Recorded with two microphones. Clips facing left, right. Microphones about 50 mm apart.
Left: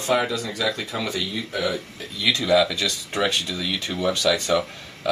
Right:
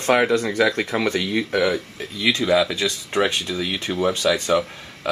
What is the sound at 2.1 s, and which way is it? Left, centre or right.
Speech, right.